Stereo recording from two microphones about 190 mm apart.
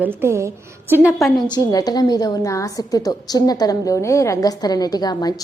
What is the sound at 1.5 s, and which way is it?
A woman's voice, 20° left (ahead or behind).